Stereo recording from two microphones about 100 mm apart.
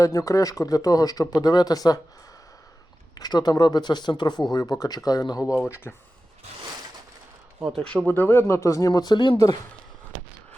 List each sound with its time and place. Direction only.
0.0 s speech: 35° left (ahead or behind)
3.2 s speech: 40° left (ahead or behind)
5.6 s speech: 25° left (ahead or behind)
7.8 s speech: 5° left (ahead or behind)
8.0 s speech: 20° left (ahead or behind); by 9.4 s 50° left (ahead or behind)